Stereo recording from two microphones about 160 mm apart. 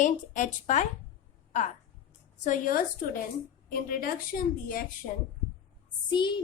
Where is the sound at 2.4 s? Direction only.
55° left (ahead or behind).